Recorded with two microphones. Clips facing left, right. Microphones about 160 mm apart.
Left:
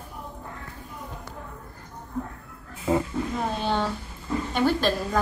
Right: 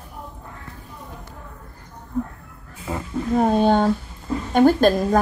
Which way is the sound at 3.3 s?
50° right (ahead or behind).